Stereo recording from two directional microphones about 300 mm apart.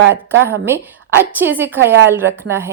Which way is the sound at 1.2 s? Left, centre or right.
Centre.